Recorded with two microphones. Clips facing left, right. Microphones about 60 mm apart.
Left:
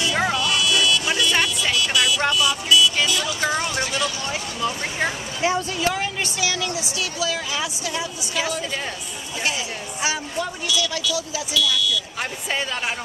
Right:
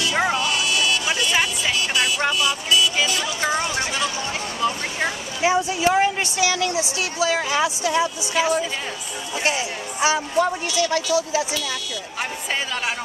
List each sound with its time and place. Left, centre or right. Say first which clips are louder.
0.5 s a sound: left 1 dB; right
1.8 s music: left 1 dB; right
3.3 s speech: even; centre
4.3 s speech: right 2 dB; centre
5.4 s speech: right 3 dB; centre; by 12.0 s right
12.2 s speech: even; centre